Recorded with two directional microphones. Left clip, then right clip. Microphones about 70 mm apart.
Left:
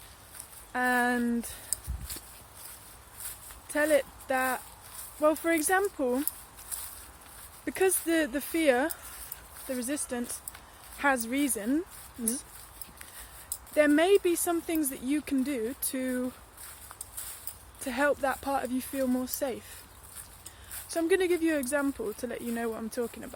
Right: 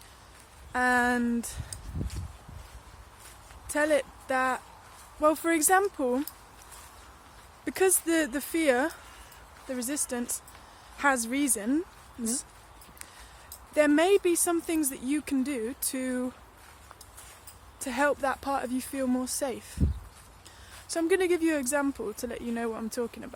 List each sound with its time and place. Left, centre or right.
0.7 s speech: right
3.7 s speech: right
5.2 s speech: right
7.6 s speech: right
8.0 s speech: right
10.9 s speech: right
13.7 s speech: right
17.7 s speech: right
18.9 s speech: right
20.8 s speech: right